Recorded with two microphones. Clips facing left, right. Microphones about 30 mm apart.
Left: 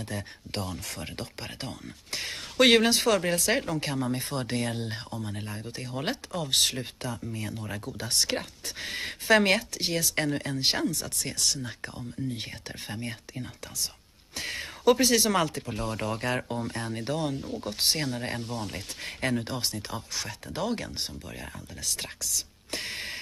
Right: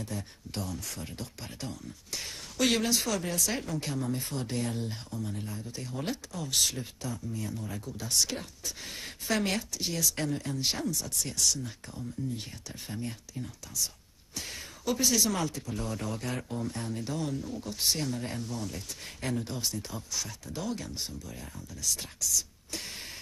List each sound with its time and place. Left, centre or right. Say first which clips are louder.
0.0 s speech: left 2 dB; left